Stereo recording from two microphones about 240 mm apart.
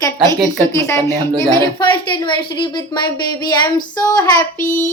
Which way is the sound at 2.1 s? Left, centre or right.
Centre.